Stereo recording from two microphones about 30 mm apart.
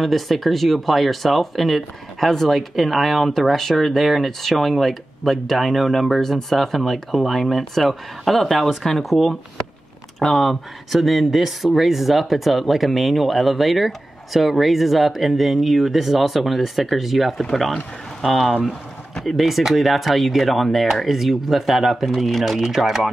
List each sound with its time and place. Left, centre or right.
0.0 s speech: centre
17.4 s speech: centre
18.5 s speech: centre
19.2 s speech: centre